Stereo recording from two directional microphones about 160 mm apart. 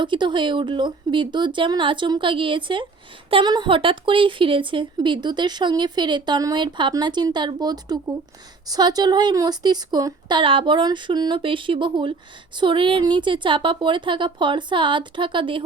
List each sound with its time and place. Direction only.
0.0 s a woman's voice: 30° right (ahead or behind)